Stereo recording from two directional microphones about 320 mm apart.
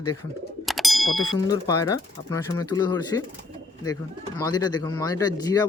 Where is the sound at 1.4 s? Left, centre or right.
Centre.